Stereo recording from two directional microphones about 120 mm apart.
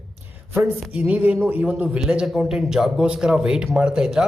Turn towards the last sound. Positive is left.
turn(degrees=-5)  # may be behind; listen again after turning